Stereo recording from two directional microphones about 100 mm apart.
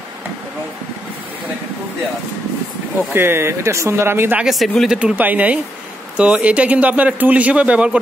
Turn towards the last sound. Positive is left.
turn(degrees=-10)  # may be behind; listen again after turning